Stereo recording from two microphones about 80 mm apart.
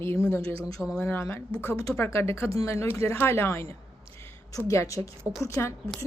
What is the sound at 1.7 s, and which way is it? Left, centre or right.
Speech, left.